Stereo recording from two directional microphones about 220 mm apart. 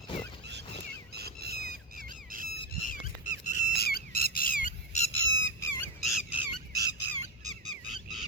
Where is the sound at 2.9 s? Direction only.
40° left (ahead or behind).